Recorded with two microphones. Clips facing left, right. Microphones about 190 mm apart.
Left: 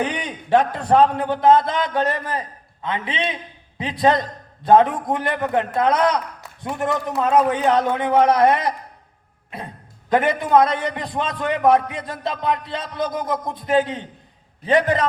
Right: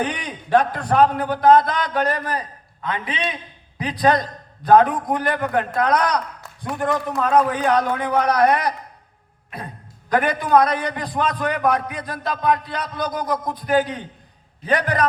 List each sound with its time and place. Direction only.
0.1 s a man's voice: 25° left (ahead or behind)
10.1 s a man's voice: 25° left (ahead or behind)